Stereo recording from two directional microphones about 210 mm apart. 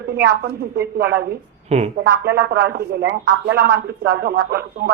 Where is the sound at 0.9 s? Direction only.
50° right (ahead or behind).